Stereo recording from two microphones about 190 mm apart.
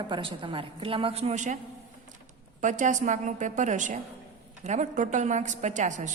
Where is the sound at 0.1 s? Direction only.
25° right (ahead or behind).